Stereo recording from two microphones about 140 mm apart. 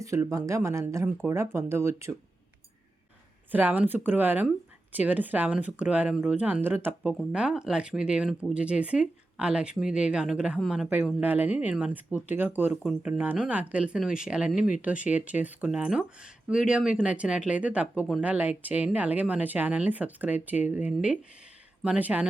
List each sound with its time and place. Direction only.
0.0 s speech: 20° right (ahead or behind)
3.5 s speech: 10° right (ahead or behind)
12.7 s speech: centre (ahead or behind)
13.0 s speech: 10° right (ahead or behind)